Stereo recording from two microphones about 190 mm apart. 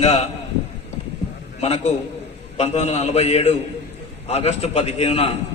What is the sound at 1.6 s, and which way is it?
A man's voice, 35° left (ahead or behind).